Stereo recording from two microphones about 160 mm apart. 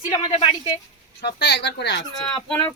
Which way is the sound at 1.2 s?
90° left.